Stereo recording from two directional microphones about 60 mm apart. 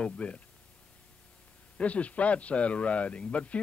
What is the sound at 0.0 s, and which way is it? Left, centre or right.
Speech, centre.